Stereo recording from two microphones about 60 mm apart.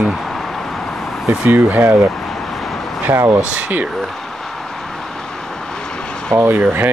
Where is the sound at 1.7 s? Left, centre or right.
Right.